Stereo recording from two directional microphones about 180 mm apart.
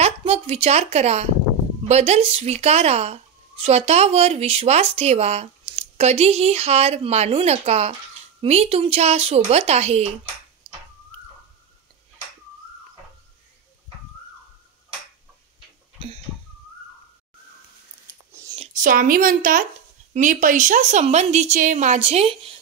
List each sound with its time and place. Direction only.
0.0 s speech: 35° right (ahead or behind)
10.6 s tick-tock: 30° right (ahead or behind)
18.8 s a woman's voice: 50° right (ahead or behind); by 22.5 s 35° right (ahead or behind)